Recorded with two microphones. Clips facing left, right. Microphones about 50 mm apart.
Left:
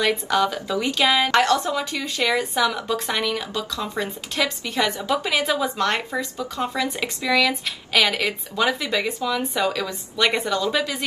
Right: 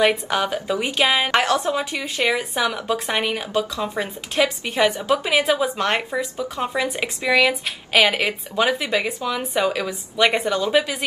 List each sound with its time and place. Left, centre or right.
0.0 s a woman's voice: right
1.7 s speech: right
5.4 s speech: centre